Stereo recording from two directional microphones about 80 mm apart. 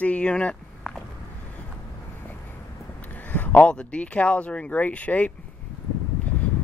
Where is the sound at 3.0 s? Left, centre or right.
Left.